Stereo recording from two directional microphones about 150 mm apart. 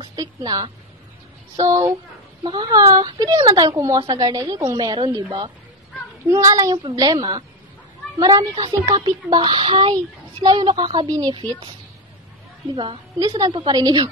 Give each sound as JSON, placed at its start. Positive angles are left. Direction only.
{"t": 0.1, "sound": "a woman's voice", "side_deg": -25}
{"t": 6.2, "sound": "a woman's voice", "side_deg": -20}
{"t": 12.7, "sound": "a woman's voice", "side_deg": -35}